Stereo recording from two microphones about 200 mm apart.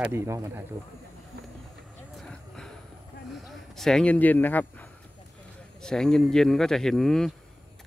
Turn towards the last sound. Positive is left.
turn(degrees=0)  # may be behind; listen again after turning